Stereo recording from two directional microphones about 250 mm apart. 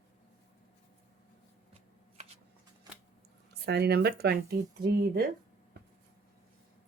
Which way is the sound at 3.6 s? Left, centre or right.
Right.